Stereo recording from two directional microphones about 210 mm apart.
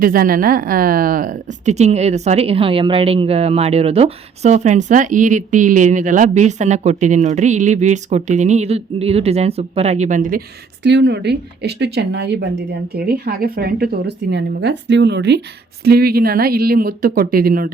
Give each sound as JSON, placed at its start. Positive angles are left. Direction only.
{"t": 0.0, "sound": "speech", "side_deg": -45}
{"t": 10.8, "sound": "speech", "side_deg": -55}